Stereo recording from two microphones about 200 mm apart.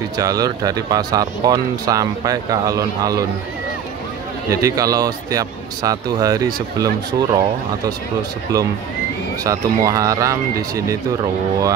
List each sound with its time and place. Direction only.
0.2 s speech: 15° right (ahead or behind)
4.5 s speech: 15° right (ahead or behind)
9.4 s speech: 15° right (ahead or behind)